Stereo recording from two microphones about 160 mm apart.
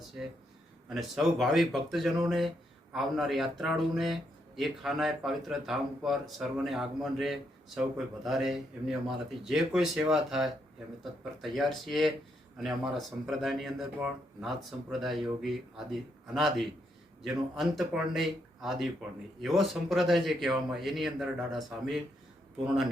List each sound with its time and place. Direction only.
0.9 s speech: centre (ahead or behind)